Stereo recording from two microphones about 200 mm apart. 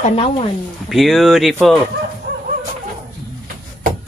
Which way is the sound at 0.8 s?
Centre (ahead or behind).